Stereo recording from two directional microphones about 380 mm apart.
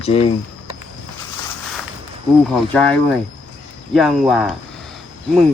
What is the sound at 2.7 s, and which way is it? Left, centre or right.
Speech, centre.